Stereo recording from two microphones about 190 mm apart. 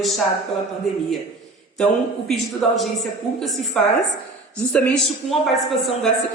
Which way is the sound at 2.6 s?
Centre (ahead or behind).